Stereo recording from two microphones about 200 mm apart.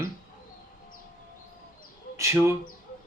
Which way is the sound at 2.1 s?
15° right (ahead or behind).